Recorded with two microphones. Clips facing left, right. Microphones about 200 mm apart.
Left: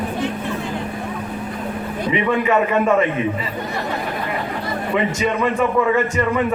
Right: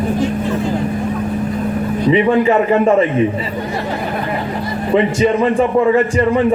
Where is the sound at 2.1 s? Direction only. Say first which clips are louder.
Right 6 dB; 30° right (ahead or behind).